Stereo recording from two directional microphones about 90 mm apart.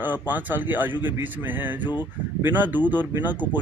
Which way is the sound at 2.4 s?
20° right (ahead or behind).